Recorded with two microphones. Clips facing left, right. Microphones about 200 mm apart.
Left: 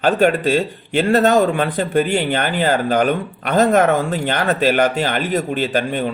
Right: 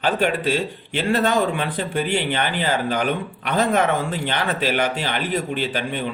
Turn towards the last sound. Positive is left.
turn(degrees=45)  # may be behind; listen again after turning